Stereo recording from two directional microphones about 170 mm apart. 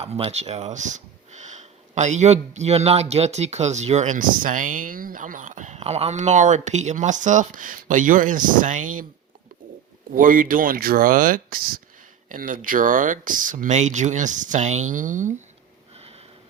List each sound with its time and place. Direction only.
0.0 s speech: 35° right (ahead or behind)
10.2 s speech: 55° right (ahead or behind)
16.0 s sniff: 35° right (ahead or behind)